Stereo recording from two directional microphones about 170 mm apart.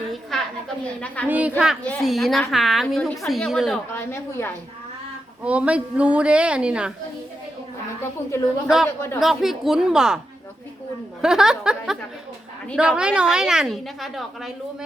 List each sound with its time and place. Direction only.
0.1 s a sound: centre (ahead or behind)
1.0 s a woman's voice: 10° left (ahead or behind)
1.3 s a woman's voice: 10° right (ahead or behind)
3.9 s a woman's voice: 15° left (ahead or behind)
5.4 s a woman's voice: 10° right (ahead or behind)
8.0 s a woman's voice: 15° left (ahead or behind)
9.2 s a woman's voice: centre (ahead or behind)
11.2 s a woman's voice: 5° right (ahead or behind)